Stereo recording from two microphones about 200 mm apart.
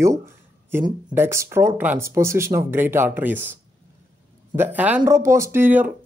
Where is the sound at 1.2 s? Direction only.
15° right (ahead or behind).